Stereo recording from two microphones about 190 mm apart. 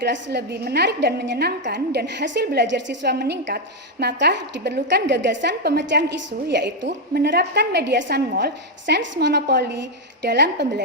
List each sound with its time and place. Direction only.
0.0 s a woman's voice: 65° right (ahead or behind)